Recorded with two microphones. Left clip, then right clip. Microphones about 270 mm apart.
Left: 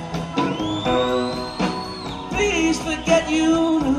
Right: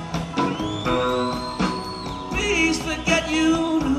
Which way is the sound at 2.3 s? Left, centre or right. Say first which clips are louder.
Left 1 dB; centre.